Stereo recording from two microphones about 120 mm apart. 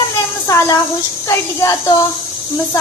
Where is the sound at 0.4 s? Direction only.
25° left (ahead or behind).